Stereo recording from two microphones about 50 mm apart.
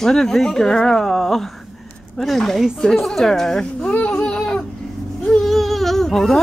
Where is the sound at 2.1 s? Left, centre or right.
Centre.